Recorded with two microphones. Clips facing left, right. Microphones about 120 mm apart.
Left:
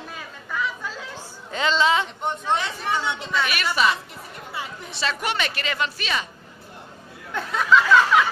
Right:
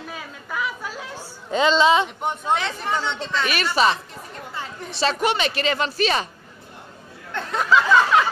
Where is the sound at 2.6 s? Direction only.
10° left (ahead or behind).